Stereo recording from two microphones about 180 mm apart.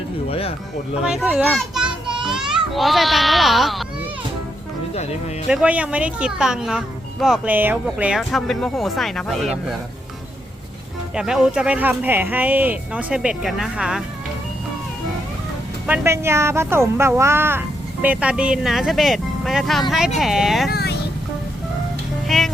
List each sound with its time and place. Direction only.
0.3 s speech: 35° left (ahead or behind)
1.0 s speech: 5° right (ahead or behind)
1.5 s children playing: centre (ahead or behind)
2.2 s speech: 5° right (ahead or behind)
5.5 s speech: 5° right (ahead or behind)
11.1 s speech: 5° right (ahead or behind)
15.9 s speech: 15° right (ahead or behind)
20.7 s vehicle: 60° left (ahead or behind)
22.3 s music: centre (ahead or behind)